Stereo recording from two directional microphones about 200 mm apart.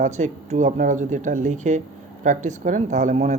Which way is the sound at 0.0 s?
35° right (ahead or behind).